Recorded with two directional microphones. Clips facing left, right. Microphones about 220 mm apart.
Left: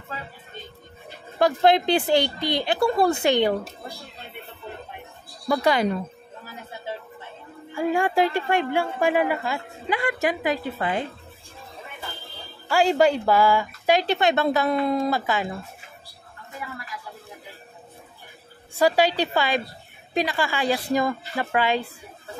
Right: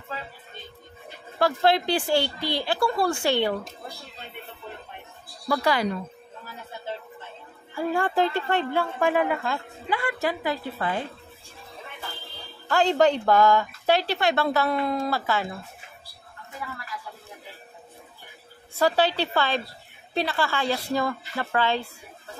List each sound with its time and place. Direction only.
1.4 s speech: 20° left (ahead or behind)
5.5 s speech: 20° left (ahead or behind)
7.7 s a woman's voice: 15° left (ahead or behind)
9.8 s a woman's voice: 20° left (ahead or behind)
12.6 s a woman's voice: 10° left (ahead or behind)
18.8 s a woman's voice: 15° left (ahead or behind)